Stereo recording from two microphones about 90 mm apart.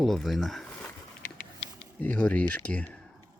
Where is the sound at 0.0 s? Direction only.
Centre (ahead or behind).